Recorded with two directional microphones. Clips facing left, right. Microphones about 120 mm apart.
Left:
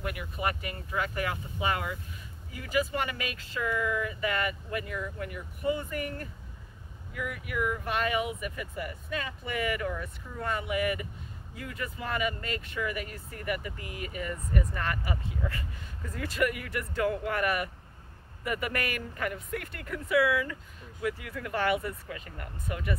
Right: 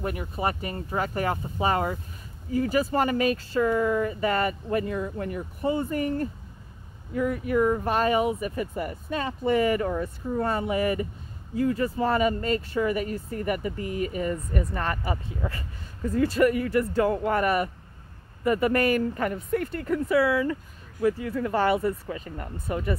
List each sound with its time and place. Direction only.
0.0 s speech: 35° right (ahead or behind)